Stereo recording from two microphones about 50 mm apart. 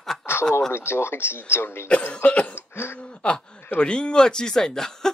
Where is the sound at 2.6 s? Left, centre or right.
Left.